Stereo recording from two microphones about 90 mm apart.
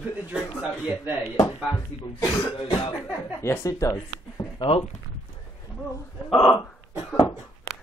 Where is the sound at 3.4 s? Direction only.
30° left (ahead or behind).